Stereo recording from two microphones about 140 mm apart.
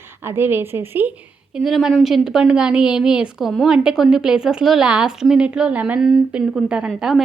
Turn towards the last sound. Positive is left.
turn(degrees=0)  # may be behind; listen again after turning